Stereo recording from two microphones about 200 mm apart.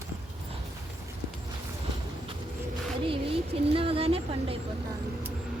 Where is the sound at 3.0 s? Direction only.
30° right (ahead or behind).